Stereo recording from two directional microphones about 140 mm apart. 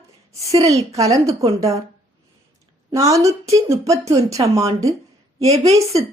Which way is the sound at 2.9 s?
25° right (ahead or behind).